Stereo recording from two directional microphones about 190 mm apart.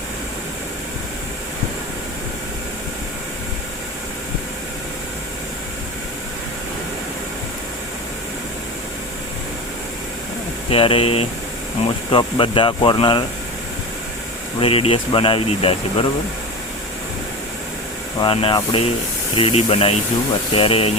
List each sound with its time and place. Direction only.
10.7 s speech: 30° left (ahead or behind)
14.6 s speech: 30° left (ahead or behind)
18.2 s speech: 25° left (ahead or behind)